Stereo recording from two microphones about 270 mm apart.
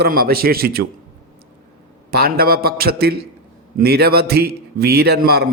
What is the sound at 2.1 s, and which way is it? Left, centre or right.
A man's voice, right.